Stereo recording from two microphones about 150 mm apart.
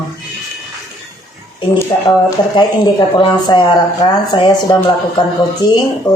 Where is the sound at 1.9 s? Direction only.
25° left (ahead or behind).